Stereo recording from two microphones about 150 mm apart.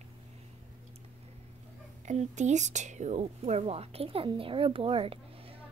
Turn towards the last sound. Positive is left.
turn(degrees=-40)  # may be behind; listen again after turning